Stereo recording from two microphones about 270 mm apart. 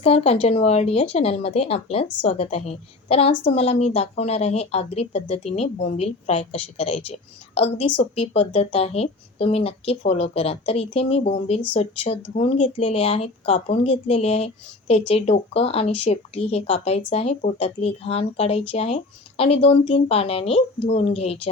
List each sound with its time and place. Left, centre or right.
0.0 s speech: left